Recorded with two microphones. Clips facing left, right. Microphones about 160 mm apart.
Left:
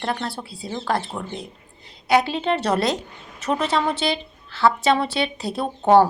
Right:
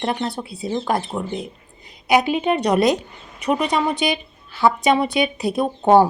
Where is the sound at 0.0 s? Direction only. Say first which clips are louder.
Right 3 dB; 20° right (ahead or behind).